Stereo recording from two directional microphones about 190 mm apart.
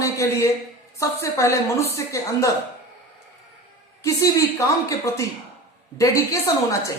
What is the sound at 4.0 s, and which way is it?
A woman's voice, 15° left (ahead or behind).